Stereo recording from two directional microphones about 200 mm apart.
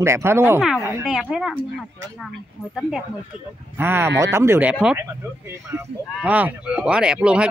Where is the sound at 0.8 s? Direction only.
15° right (ahead or behind).